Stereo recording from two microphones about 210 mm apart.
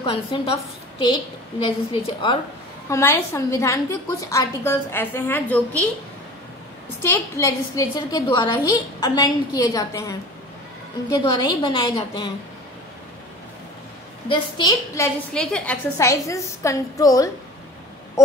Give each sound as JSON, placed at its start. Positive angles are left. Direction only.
{"t": 0.0, "sound": "a woman's voice", "side_deg": 25}
{"t": 2.9, "sound": "a woman's voice", "side_deg": 10}
{"t": 7.0, "sound": "a woman's voice", "side_deg": 15}
{"t": 14.3, "sound": "a woman's voice", "side_deg": 20}